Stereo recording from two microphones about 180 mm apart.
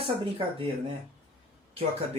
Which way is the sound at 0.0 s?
30° right (ahead or behind).